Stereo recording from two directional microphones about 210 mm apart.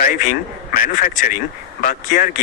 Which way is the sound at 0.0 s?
40° left (ahead or behind).